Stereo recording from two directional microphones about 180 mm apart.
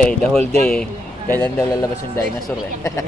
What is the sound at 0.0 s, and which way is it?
Speech, 5° left (ahead or behind).